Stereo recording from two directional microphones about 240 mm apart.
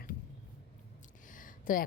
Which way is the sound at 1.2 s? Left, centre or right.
Left.